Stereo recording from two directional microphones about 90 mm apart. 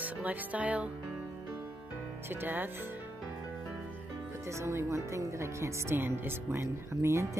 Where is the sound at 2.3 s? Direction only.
20° right (ahead or behind).